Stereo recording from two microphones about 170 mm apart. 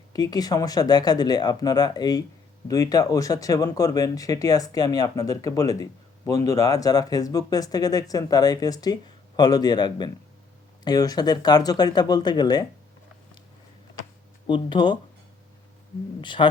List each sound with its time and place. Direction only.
0.1 s speech: 20° left (ahead or behind)
14.4 s speech: 25° left (ahead or behind)
16.2 s speech: 30° left (ahead or behind)